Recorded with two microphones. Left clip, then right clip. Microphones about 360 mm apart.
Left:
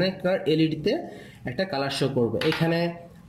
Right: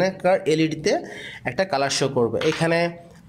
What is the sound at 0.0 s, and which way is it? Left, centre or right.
Speech, centre.